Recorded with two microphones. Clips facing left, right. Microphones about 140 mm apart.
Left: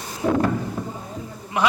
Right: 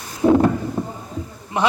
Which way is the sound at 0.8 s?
30° right (ahead or behind).